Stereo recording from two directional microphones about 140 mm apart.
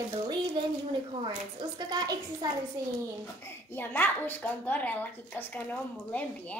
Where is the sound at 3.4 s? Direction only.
15° left (ahead or behind).